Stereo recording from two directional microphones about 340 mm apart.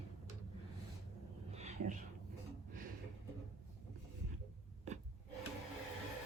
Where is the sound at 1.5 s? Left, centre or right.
Centre.